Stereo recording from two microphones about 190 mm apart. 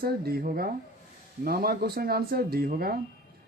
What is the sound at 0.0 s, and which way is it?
Speech, 55° right (ahead or behind).